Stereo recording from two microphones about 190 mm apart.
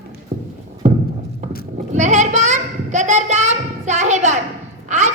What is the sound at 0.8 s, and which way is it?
Horse, 40° right (ahead or behind).